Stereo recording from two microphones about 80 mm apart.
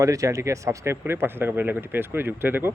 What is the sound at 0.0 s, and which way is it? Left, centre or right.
Speech, right.